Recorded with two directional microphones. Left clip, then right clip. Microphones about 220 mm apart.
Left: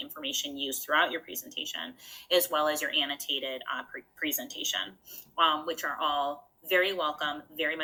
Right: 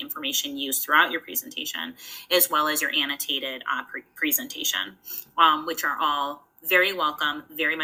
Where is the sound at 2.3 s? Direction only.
30° right (ahead or behind).